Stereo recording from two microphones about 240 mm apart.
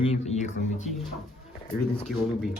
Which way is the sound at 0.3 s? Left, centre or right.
Left.